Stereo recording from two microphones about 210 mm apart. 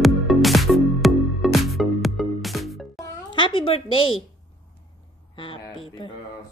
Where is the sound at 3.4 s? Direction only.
25° left (ahead or behind).